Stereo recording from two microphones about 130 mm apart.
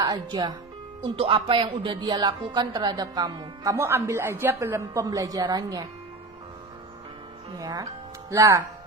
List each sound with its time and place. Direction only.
0.0 s speech: 30° right (ahead or behind)
1.1 s speech: 45° right (ahead or behind); by 5.9 s 25° right (ahead or behind)
7.5 s speech: 30° right (ahead or behind)